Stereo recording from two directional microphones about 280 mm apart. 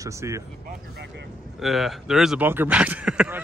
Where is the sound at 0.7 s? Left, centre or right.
Right.